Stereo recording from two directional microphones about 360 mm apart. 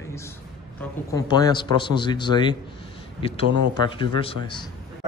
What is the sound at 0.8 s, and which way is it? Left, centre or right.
A man's voice, centre.